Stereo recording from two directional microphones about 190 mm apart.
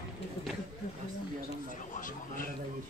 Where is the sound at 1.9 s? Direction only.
45° left (ahead or behind).